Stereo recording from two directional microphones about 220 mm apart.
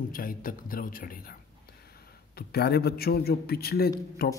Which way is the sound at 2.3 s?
45° left (ahead or behind).